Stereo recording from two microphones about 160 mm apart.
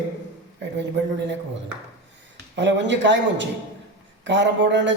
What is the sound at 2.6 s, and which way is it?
Speech, 90° right.